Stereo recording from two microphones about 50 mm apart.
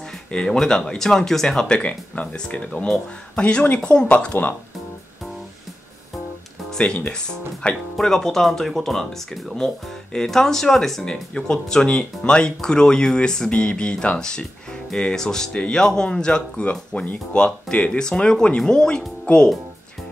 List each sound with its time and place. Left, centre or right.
0.0 s music: centre
0.5 s speech: centre
4.1 s speech: left
6.8 s speech: centre
17.0 s speech: left